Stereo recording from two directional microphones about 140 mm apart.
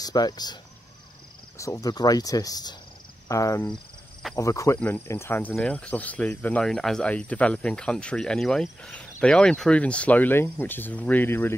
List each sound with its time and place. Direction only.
0.0 s speech: 30° left (ahead or behind)
1.6 s speech: 25° left (ahead or behind)